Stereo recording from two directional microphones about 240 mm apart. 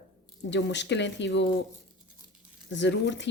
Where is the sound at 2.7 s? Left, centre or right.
Left.